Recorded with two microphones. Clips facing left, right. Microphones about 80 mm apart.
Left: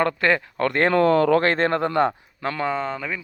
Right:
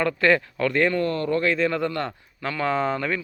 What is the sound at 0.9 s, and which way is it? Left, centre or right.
Speech, left.